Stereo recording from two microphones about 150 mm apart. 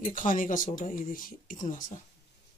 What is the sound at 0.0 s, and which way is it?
Speech, 65° left (ahead or behind).